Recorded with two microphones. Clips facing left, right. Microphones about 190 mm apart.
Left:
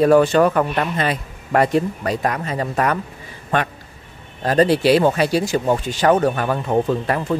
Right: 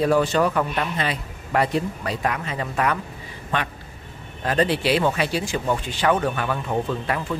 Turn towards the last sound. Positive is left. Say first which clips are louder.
# left 5 dB
turn(degrees=40)  # may be behind; listen again after turning